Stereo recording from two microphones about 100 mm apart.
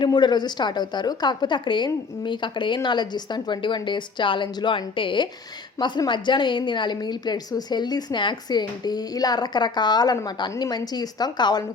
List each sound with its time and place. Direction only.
0.0 s a woman's voice: 50° left (ahead or behind)